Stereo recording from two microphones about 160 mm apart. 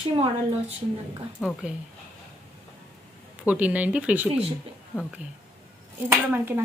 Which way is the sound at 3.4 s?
10° right (ahead or behind).